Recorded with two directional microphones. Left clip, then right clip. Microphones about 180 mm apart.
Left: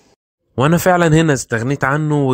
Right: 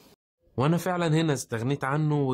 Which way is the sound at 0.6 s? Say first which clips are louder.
Left 14 dB; 35° left (ahead or behind).